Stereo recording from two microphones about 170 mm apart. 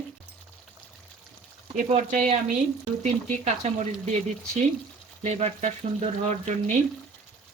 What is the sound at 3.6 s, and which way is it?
Speech, 40° right (ahead or behind).